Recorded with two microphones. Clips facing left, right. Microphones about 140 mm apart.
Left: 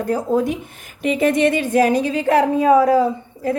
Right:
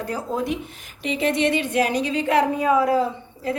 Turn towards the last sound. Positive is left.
turn(degrees=45)  # may be behind; listen again after turning